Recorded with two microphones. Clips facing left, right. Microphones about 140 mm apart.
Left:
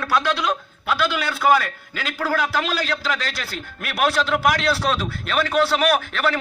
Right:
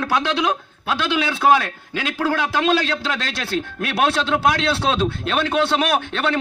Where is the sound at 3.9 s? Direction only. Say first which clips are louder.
Right 1 dB; 30° right (ahead or behind).